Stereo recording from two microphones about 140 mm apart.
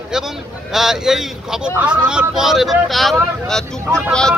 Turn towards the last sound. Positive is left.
turn(degrees=5)  # may be behind; listen again after turning